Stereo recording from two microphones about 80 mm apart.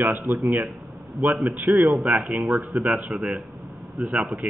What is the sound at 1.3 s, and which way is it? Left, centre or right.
A man's voice, centre.